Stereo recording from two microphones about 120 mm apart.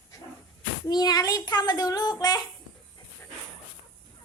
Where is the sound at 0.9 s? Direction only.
35° left (ahead or behind).